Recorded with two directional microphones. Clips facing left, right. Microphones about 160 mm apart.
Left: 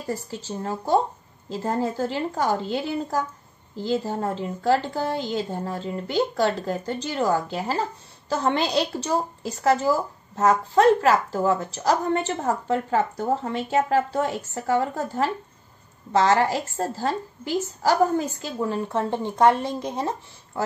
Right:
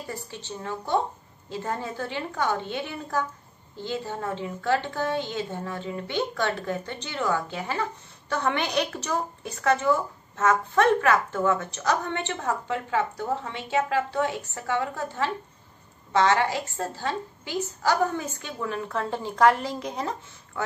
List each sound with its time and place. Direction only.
0.1 s a woman's voice: 40° left (ahead or behind)
18.6 s speech: 25° left (ahead or behind)